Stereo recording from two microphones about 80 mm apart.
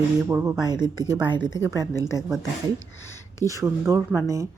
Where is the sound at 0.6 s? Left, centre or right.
Right.